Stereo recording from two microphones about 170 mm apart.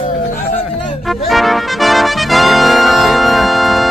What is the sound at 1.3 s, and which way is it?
Music, centre (ahead or behind).